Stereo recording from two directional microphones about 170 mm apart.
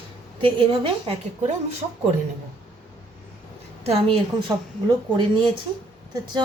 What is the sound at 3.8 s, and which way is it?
Speech, 35° right (ahead or behind).